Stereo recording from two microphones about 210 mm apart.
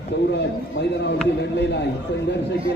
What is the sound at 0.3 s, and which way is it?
Speech, 55° left (ahead or behind).